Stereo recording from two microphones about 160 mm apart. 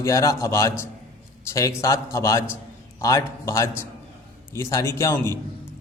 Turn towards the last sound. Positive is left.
turn(degrees=15)  # may be behind; listen again after turning